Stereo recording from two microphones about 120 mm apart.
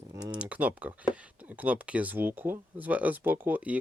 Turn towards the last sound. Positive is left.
turn(degrees=-15)  # may be behind; listen again after turning